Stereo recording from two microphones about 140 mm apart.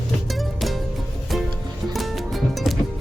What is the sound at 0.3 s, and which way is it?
Music, centre (ahead or behind).